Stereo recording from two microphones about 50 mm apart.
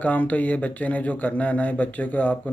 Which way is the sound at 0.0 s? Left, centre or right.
Left.